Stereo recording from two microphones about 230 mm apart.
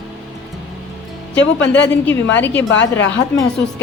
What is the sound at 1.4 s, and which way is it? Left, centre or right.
Speech, left.